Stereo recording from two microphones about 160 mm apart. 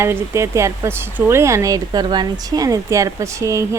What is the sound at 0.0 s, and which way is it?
Speech, 15° right (ahead or behind).